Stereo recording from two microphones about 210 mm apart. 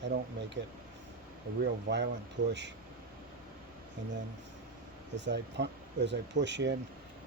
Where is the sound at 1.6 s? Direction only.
55° right (ahead or behind).